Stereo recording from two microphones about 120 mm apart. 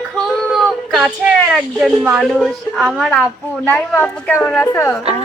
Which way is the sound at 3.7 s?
15° left (ahead or behind).